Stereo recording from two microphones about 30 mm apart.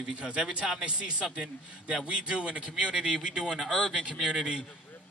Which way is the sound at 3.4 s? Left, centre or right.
Centre.